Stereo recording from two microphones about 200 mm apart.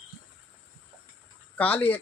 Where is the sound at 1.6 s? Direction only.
5° left (ahead or behind).